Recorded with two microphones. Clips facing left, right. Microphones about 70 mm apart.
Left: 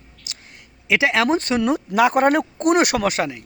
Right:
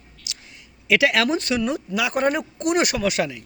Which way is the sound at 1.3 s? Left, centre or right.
Left.